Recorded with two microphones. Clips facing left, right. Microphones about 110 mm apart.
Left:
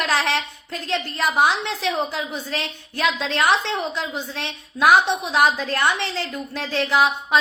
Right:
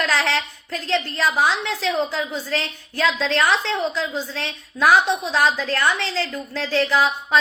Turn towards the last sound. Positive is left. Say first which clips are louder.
# left 1 dB
turn(degrees=20)  # may be behind; listen again after turning